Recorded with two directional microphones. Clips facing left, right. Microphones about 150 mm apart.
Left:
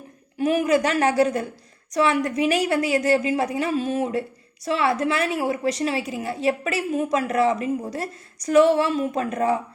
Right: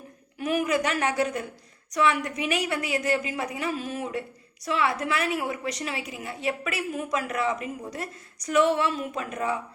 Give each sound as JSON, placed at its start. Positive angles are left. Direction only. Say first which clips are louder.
{"t": 0.3, "sound": "a woman's voice", "louder": "left 6 dB", "side_deg": 30}